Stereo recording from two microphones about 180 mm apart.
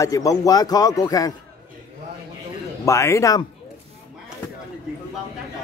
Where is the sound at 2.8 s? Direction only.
15° left (ahead or behind).